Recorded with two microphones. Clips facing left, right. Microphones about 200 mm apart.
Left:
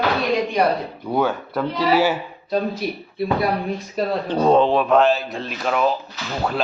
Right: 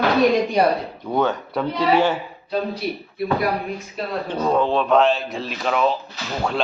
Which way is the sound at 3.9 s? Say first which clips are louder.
Left 5 dB; 30° left (ahead or behind).